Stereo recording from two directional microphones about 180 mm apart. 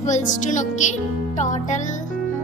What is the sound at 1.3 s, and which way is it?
Music, 40° left (ahead or behind).